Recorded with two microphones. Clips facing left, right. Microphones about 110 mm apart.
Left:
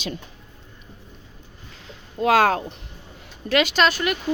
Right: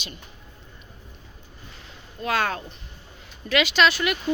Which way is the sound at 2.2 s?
90° left.